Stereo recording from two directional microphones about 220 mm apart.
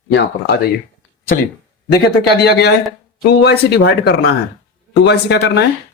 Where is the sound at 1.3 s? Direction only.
40° left (ahead or behind).